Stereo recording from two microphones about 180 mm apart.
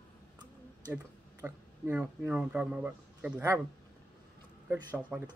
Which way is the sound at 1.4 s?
10° right (ahead or behind).